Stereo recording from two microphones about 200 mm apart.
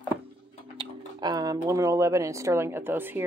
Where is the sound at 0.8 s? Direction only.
20° right (ahead or behind).